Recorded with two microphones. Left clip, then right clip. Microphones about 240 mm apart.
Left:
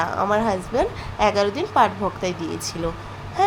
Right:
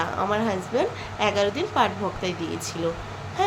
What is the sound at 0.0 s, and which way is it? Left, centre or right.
A woman's voice, left.